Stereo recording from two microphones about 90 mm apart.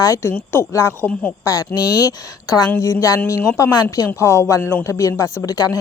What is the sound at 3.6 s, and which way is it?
A woman's voice, 45° left (ahead or behind).